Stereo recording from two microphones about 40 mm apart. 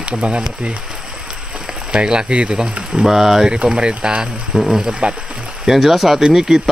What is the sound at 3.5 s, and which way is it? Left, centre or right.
Speech, right.